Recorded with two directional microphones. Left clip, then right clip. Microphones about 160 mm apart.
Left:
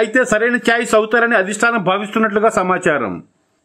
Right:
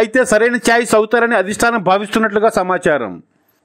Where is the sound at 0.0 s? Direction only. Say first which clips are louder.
Right 2 dB; 35° right (ahead or behind).